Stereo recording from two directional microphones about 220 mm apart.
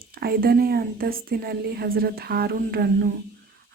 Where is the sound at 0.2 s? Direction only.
45° right (ahead or behind).